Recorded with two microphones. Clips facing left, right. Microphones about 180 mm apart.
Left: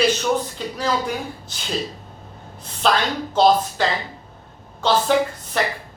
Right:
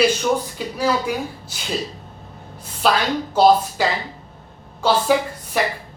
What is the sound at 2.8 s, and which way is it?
Speech, 5° right (ahead or behind).